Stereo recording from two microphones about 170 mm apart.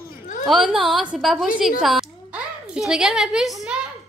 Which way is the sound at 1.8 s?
5° right (ahead or behind).